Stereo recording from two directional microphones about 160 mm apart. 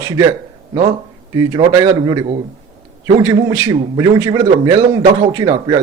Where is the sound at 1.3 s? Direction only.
25° right (ahead or behind).